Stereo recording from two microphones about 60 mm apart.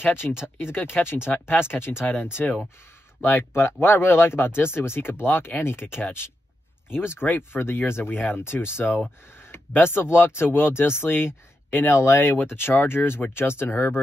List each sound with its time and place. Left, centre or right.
0.0 s speech: left